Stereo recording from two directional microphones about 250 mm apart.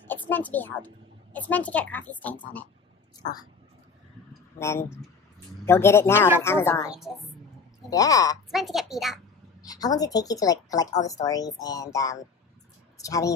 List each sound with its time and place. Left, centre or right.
0.0 s a child's voice: centre
4.3 s a sound: centre
5.7 s a woman's voice: centre
6.9 s a woman's voice: centre
7.9 s a woman's voice: centre
8.5 s a woman's voice: centre
9.6 s a woman's voice: centre